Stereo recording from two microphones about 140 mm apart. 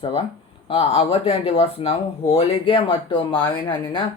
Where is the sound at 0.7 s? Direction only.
45° left (ahead or behind).